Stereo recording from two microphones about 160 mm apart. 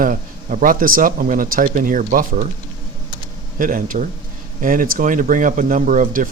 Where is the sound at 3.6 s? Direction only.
60° right (ahead or behind).